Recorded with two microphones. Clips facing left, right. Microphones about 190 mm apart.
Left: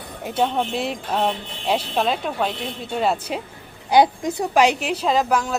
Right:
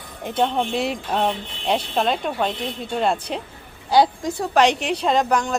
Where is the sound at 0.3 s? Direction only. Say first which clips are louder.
Even; 5° left (ahead or behind).